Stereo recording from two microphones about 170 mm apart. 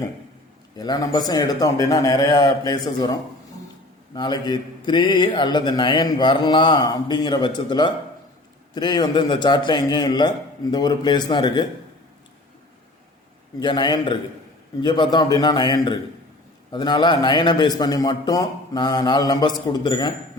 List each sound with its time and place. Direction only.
0.8 s a man's voice: 25° left (ahead or behind)
13.6 s a man's voice: 25° left (ahead or behind)